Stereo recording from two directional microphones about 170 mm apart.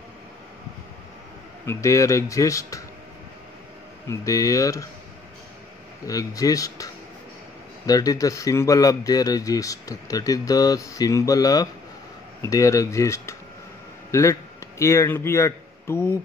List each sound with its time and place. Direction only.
1.7 s a man's voice: 20° left (ahead or behind)
4.1 s a man's voice: 20° left (ahead or behind)
6.0 s a man's voice: 20° left (ahead or behind)